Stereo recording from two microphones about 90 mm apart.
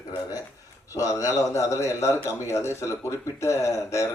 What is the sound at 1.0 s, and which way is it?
A man's voice, 35° left (ahead or behind).